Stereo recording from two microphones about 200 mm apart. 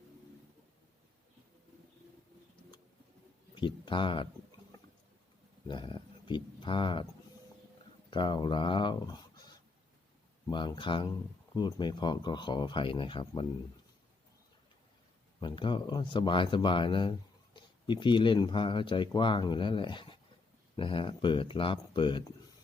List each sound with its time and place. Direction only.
3.5 s speech: 25° left (ahead or behind)
5.6 s speech: 25° left (ahead or behind)
8.1 s speech: 25° left (ahead or behind)
15.4 s speech: 25° left (ahead or behind)